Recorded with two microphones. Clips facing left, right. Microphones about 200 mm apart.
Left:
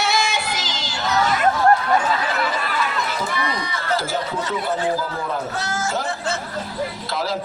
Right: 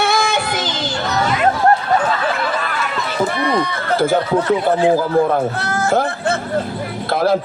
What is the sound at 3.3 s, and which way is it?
A man's voice, 55° right (ahead or behind).